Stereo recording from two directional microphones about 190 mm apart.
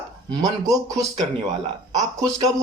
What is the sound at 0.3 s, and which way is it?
Speech, 20° right (ahead or behind).